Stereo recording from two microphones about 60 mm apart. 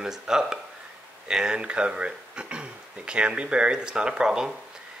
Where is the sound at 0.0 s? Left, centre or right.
Centre.